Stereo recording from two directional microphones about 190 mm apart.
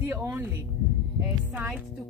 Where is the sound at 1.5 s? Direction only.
10° right (ahead or behind).